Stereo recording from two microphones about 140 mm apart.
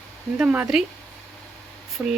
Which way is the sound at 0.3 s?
5° right (ahead or behind).